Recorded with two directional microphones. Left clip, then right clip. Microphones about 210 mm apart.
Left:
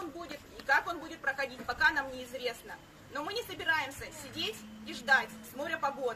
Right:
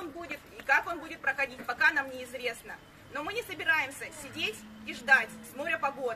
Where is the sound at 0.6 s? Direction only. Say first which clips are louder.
Right 2 dB; centre (ahead or behind).